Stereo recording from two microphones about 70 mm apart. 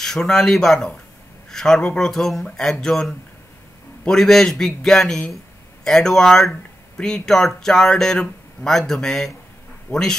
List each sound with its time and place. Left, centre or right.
0.0 s speech: centre
9.9 s speech: left